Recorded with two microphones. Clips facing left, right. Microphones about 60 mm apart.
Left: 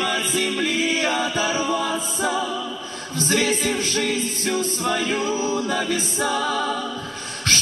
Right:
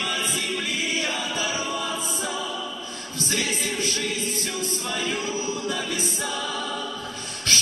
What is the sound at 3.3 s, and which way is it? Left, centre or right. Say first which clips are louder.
Music: left 6 dB; left.